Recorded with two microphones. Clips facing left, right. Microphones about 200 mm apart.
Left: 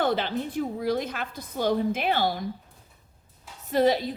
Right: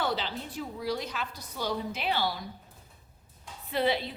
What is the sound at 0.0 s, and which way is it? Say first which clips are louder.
A woman's voice: left 6 dB; 50° left (ahead or behind).